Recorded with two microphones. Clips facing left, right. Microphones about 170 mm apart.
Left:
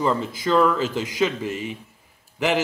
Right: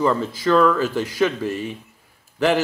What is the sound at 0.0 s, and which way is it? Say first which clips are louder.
A man's voice: right 3 dB; 15° left (ahead or behind).